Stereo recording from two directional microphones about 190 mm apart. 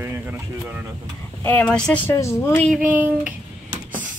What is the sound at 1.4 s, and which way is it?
Speech, 10° left (ahead or behind).